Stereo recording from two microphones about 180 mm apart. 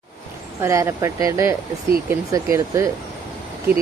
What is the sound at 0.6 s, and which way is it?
Speech, 15° right (ahead or behind).